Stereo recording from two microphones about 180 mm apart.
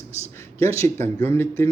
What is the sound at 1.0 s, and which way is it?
Speech, 10° left (ahead or behind).